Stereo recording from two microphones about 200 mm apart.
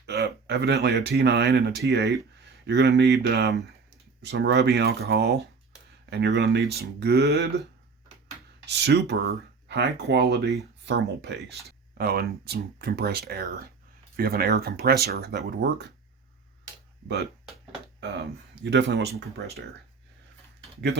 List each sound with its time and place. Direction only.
0.0 s speech: 55° right (ahead or behind)
18.0 s speech: 60° right (ahead or behind)